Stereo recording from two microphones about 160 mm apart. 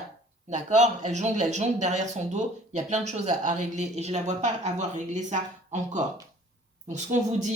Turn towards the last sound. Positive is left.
turn(degrees=-50)  # may be behind; listen again after turning